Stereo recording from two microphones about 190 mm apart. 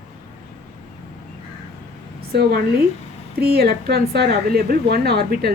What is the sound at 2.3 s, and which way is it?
A woman's voice, 55° right (ahead or behind).